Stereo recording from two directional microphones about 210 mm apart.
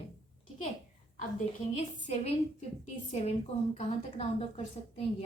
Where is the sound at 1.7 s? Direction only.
30° left (ahead or behind).